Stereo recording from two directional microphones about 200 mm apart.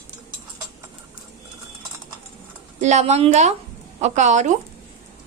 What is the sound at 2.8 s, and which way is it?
Speech, 35° right (ahead or behind).